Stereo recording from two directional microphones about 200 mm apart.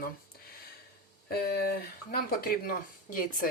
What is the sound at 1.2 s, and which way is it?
Speech, 50° left (ahead or behind).